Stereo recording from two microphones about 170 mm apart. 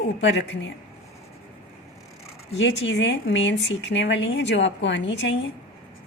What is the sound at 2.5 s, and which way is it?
A woman's voice, 90° left.